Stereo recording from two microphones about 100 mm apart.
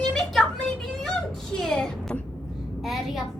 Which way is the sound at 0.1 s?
5° left (ahead or behind).